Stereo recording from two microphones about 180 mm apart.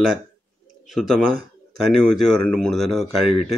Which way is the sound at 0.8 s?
Centre (ahead or behind).